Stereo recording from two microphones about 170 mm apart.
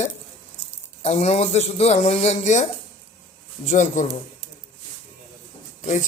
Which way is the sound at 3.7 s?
45° left (ahead or behind).